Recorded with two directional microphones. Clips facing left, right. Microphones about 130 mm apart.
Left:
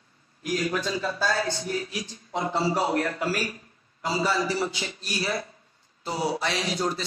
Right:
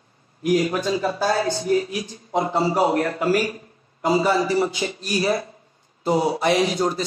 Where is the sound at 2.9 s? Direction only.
50° right (ahead or behind).